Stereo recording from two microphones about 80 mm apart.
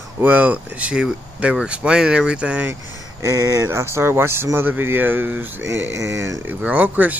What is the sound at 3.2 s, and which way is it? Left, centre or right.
Speech, right.